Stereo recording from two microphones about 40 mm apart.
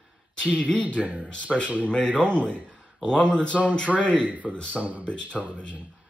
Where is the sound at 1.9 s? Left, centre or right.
Left.